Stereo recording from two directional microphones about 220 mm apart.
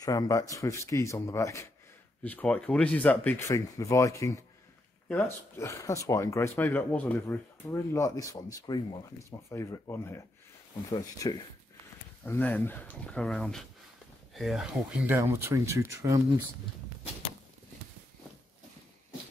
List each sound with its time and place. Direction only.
0.0 s speech: 15° left (ahead or behind); by 16.2 s 15° right (ahead or behind)